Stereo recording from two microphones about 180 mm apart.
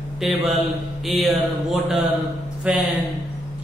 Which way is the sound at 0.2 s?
Centre (ahead or behind).